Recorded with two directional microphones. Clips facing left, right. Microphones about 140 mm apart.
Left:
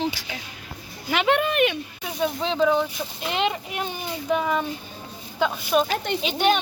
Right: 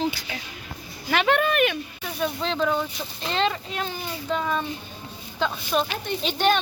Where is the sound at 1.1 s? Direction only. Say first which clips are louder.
Even; 15° left (ahead or behind).